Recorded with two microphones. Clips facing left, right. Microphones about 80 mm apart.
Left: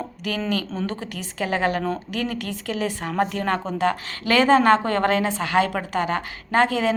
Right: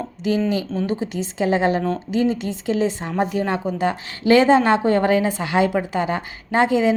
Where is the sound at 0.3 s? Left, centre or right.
Centre.